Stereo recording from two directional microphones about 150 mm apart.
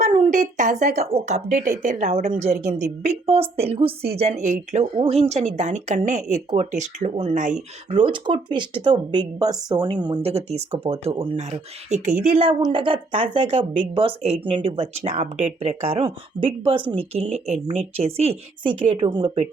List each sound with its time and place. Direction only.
0.0 s a sound: 35° right (ahead or behind)
0.3 s speech: 55° right (ahead or behind)
1.8 s a woman's voice: 65° right (ahead or behind)
2.6 s speech: 50° right (ahead or behind)
7.9 s speech: 35° right (ahead or behind); by 12.4 s 60° right (ahead or behind)
12.4 s speech: 30° right (ahead or behind)
16.4 s a woman's voice: 55° right (ahead or behind)
16.9 s speech: 45° right (ahead or behind)